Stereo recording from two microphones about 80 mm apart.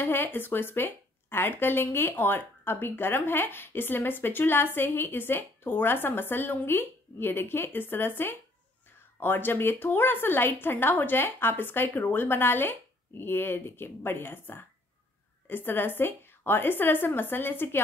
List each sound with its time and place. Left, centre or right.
0.0 s speech: left